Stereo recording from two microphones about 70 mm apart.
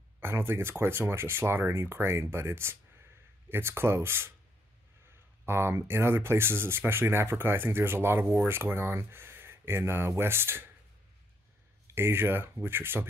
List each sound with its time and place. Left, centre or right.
0.2 s speech: right
5.4 s speech: right
11.9 s speech: right